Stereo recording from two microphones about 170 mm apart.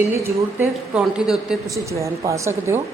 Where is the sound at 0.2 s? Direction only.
10° right (ahead or behind).